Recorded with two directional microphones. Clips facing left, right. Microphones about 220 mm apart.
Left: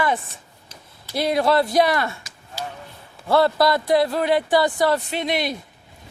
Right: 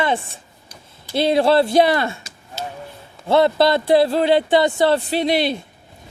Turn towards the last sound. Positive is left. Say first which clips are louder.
# right 5 dB
turn(degrees=-30)  # may be behind; listen again after turning